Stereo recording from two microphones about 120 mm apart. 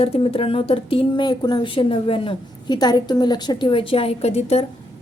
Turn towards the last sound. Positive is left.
turn(degrees=60)  # may be behind; listen again after turning